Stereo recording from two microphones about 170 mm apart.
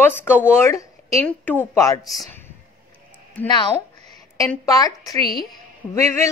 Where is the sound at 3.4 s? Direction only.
10° left (ahead or behind).